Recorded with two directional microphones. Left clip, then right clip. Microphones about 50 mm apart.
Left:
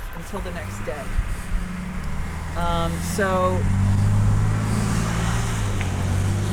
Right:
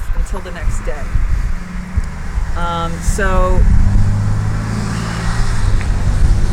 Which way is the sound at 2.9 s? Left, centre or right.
Left.